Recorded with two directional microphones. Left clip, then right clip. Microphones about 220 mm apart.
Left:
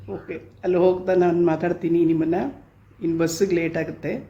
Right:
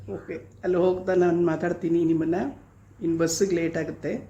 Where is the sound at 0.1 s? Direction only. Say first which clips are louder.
Left 2 dB; 5° left (ahead or behind).